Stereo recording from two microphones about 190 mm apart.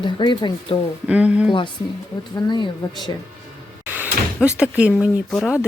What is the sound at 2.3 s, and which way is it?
Speech, 25° left (ahead or behind).